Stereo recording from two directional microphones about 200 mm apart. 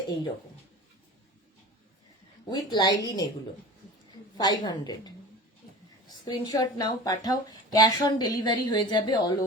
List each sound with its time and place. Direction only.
2.5 s speech: 20° left (ahead or behind)
4.4 s speech: 20° left (ahead or behind)
6.2 s speech: 20° left (ahead or behind)